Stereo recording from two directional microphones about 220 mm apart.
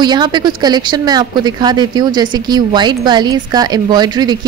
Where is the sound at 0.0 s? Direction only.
20° right (ahead or behind).